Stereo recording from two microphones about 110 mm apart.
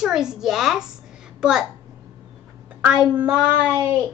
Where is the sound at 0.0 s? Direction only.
5° right (ahead or behind).